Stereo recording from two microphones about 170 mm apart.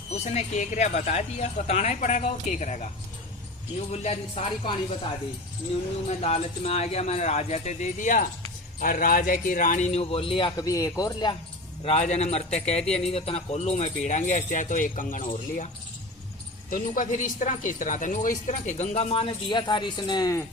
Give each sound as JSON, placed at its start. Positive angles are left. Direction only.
{"t": 0.1, "sound": "speech", "side_deg": 40}
{"t": 3.9, "sound": "a man's voice", "side_deg": 40}
{"t": 6.1, "sound": "a man's voice", "side_deg": 40}
{"t": 11.8, "sound": "a man's voice", "side_deg": 35}
{"t": 16.6, "sound": "speech", "side_deg": 55}